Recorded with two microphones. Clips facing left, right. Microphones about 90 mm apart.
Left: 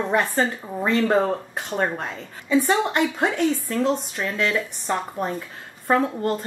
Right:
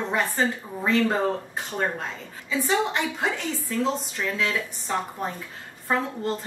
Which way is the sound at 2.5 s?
55° left (ahead or behind).